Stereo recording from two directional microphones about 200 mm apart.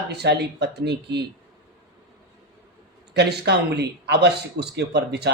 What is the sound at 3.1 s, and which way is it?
Speech, 55° right (ahead or behind).